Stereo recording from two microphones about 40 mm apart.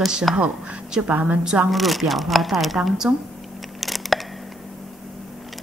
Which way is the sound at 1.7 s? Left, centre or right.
Centre.